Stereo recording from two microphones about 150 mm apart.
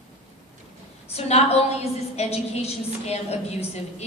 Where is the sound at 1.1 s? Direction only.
45° left (ahead or behind).